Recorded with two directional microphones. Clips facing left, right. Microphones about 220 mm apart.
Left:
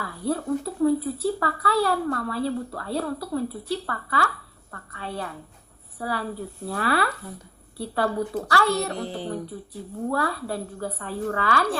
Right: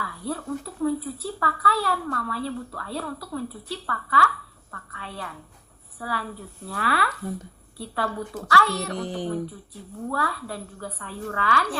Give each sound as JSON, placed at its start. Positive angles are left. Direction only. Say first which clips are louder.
{"t": 0.0, "sound": "a woman's voice", "louder": "left 4 dB", "side_deg": 35}
{"t": 9.0, "sound": "music", "louder": "right 2 dB", "side_deg": -15}
{"t": 10.1, "sound": "a woman's voice", "louder": "left 3 dB", "side_deg": 30}